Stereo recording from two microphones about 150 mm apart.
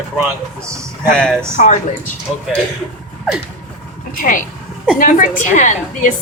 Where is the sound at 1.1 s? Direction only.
5° left (ahead or behind).